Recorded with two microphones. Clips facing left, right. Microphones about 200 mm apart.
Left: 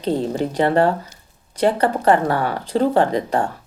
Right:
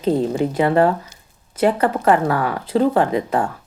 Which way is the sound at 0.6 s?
35° left (ahead or behind).